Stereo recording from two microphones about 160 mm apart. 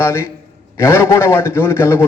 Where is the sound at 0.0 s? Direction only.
15° left (ahead or behind).